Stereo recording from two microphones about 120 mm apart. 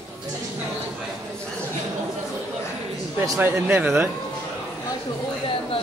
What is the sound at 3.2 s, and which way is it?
Speech, 20° right (ahead or behind).